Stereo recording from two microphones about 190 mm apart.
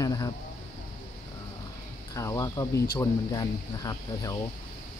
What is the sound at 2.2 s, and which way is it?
Speech, 15° left (ahead or behind).